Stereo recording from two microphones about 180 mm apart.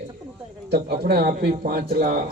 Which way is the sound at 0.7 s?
60° right (ahead or behind).